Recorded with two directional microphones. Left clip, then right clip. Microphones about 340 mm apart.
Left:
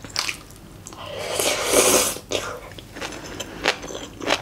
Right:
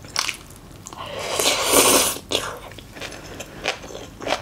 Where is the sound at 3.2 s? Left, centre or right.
Left.